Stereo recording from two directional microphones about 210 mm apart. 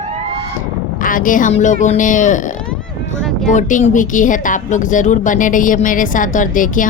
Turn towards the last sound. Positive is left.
turn(degrees=40)  # may be behind; listen again after turning